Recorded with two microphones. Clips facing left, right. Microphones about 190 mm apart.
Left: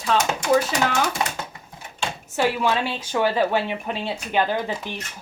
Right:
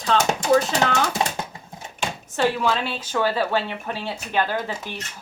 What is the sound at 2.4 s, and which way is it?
A woman's voice, 15° left (ahead or behind).